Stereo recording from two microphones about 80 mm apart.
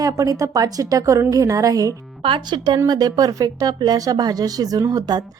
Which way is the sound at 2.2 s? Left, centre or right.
Right.